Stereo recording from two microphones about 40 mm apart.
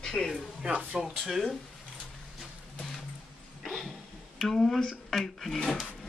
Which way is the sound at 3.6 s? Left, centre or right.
Centre.